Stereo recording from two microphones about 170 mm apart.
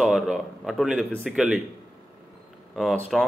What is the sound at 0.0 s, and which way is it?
Speech, centre (ahead or behind).